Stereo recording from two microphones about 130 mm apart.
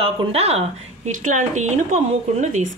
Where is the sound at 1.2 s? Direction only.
80° right.